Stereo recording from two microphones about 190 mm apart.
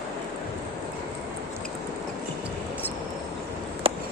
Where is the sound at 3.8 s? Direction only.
30° right (ahead or behind).